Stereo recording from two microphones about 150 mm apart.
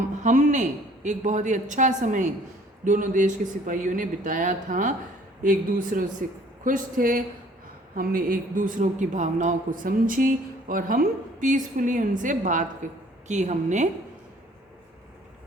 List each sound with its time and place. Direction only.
0.2 s a man's voice: 55° right (ahead or behind)